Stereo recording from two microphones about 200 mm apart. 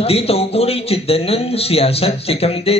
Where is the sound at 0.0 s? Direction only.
30° left (ahead or behind).